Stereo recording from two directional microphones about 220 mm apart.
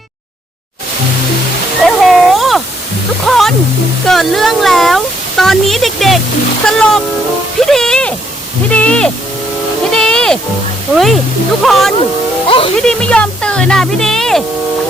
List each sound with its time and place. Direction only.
1.8 s a sound: centre (ahead or behind)
3.2 s waterfall: centre (ahead or behind)
4.0 s a sound: centre (ahead or behind)
6.7 s speech: 5° left (ahead or behind)
7.7 s a sound: centre (ahead or behind)
9.9 s music: 5° left (ahead or behind)
10.9 s speech: centre (ahead or behind)
12.5 s music: 25° left (ahead or behind)
12.8 s speech: 5° left (ahead or behind)